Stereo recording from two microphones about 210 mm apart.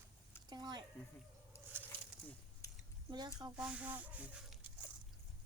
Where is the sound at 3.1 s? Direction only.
20° right (ahead or behind).